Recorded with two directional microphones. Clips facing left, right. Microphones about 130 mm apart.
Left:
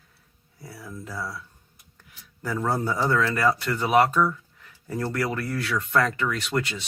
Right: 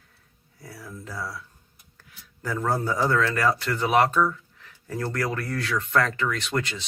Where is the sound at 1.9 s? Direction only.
15° left (ahead or behind).